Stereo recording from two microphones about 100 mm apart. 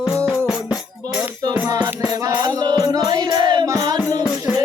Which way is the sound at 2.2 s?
45° right (ahead or behind).